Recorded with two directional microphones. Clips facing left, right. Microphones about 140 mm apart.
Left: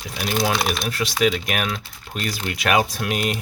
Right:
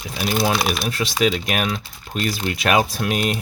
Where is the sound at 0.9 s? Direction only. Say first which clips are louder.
Left 1 dB; 25° right (ahead or behind).